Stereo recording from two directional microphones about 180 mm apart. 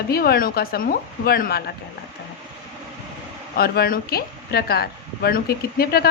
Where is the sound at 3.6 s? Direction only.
55° left (ahead or behind).